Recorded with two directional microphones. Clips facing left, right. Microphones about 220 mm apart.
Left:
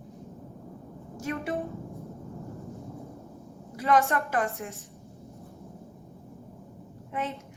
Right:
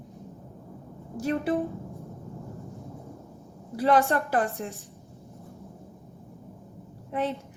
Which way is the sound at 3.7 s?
30° right (ahead or behind).